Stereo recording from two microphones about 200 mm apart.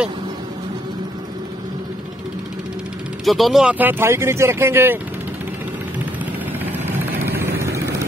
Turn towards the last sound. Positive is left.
turn(degrees=-10)  # may be behind; listen again after turning